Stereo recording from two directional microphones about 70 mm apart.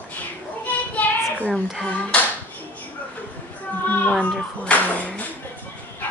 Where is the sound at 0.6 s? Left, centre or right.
Left.